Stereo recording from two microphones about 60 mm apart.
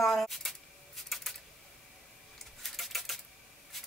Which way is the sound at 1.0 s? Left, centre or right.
Centre.